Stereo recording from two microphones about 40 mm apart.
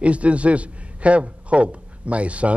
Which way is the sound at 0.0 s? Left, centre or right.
Right.